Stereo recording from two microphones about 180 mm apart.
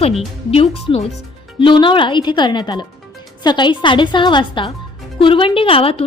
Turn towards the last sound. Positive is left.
turn(degrees=30)  # may be behind; listen again after turning